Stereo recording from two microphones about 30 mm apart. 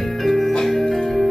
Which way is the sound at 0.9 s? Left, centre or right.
Centre.